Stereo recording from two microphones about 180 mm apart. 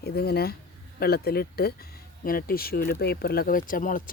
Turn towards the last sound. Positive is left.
turn(degrees=50)  # may be behind; listen again after turning